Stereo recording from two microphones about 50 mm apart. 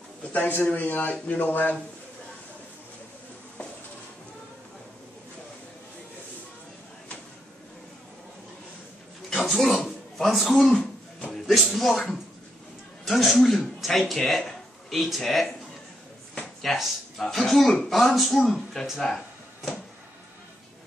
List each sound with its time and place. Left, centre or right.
0.2 s a man's voice: left
1.1 s a sound: left
1.4 s a man's voice: left
9.3 s a sound: centre
10.3 s speech: centre
16.6 s speech: centre